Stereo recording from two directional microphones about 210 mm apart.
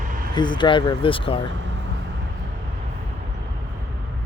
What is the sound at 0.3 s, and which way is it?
Speech, 20° left (ahead or behind).